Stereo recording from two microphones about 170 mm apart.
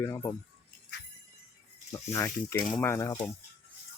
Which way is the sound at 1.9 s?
15° left (ahead or behind).